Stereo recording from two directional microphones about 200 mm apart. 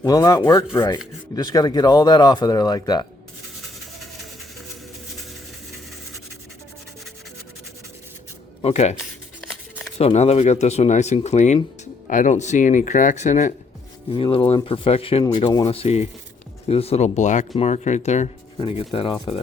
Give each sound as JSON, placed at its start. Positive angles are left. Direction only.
{"t": 0.0, "sound": "speech", "side_deg": 20}
{"t": 8.6, "sound": "speech", "side_deg": 35}
{"t": 10.0, "sound": "speech", "side_deg": 30}
{"t": 14.1, "sound": "speech", "side_deg": 25}